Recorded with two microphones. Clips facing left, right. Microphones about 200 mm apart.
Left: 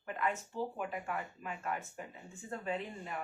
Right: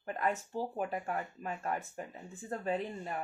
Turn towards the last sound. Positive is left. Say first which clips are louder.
# right 4 dB
turn(degrees=-35)  # may be behind; listen again after turning